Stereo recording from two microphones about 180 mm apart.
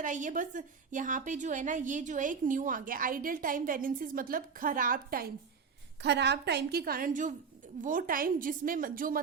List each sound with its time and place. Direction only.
0.0 s a woman's voice: 45° right (ahead or behind)
6.0 s a woman's voice: 70° right (ahead or behind); by 9.2 s 50° right (ahead or behind)